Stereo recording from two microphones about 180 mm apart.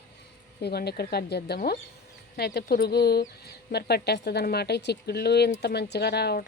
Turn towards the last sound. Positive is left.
turn(degrees=65)  # may be behind; listen again after turning